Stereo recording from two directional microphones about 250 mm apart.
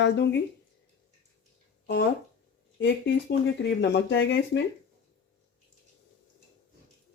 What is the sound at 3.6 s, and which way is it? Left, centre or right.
Speech, left.